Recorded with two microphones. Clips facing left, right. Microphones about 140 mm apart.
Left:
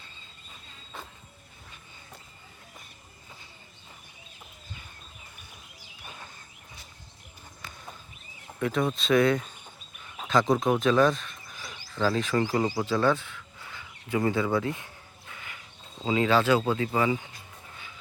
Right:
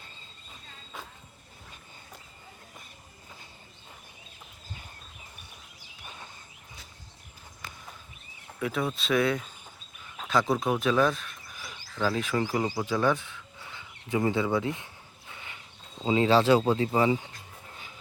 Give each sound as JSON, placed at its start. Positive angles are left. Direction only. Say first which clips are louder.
{"t": 8.5, "sound": "speech", "louder": "left 3 dB", "side_deg": -5}
{"t": 15.3, "sound": "mechanisms", "louder": "left 1 dB", "side_deg": -25}
{"t": 16.0, "sound": "speech", "louder": "right 2 dB", "side_deg": -30}